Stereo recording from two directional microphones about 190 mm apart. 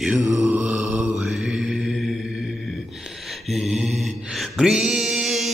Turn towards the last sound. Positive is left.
turn(degrees=0)  # may be behind; listen again after turning